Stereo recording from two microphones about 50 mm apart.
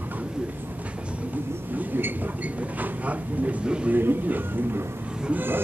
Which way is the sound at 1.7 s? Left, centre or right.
Right.